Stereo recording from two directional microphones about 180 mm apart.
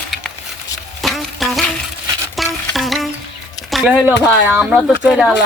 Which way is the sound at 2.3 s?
Centre (ahead or behind).